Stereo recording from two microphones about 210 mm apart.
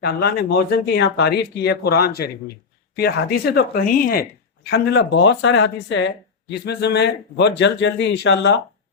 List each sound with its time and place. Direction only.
0.0 s speech: 50° left (ahead or behind)